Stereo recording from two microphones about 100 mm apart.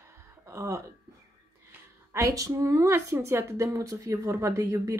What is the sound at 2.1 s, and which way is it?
A woman's voice, 35° right (ahead or behind).